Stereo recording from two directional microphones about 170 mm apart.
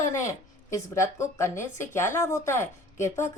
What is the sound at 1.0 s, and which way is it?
A woman's voice, 15° left (ahead or behind).